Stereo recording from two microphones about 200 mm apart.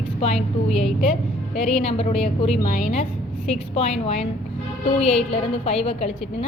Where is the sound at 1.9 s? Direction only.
30° left (ahead or behind).